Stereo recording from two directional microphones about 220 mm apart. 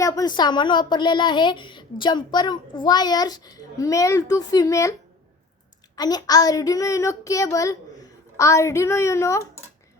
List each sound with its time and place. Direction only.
0.0 s speech: 15° left (ahead or behind)
6.0 s a child's voice: 20° left (ahead or behind)